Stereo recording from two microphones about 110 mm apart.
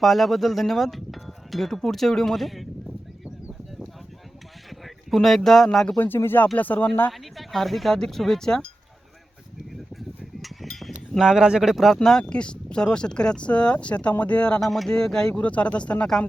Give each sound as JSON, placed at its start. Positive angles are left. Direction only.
{"t": 0.0, "sound": "speech", "side_deg": 0}
{"t": 4.7, "sound": "speech", "side_deg": 0}
{"t": 6.0, "sound": "speech", "side_deg": 20}
{"t": 7.1, "sound": "speech", "side_deg": 0}
{"t": 10.4, "sound": "a sound", "side_deg": 0}
{"t": 11.9, "sound": "speech", "side_deg": 5}